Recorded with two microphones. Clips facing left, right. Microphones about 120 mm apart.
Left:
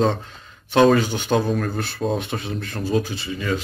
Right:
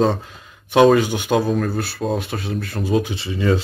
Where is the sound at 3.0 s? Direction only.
25° right (ahead or behind).